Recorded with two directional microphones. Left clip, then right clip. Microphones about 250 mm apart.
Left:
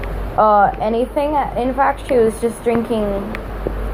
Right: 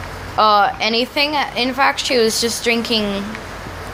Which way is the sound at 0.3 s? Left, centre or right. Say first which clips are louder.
Left 1 dB; right.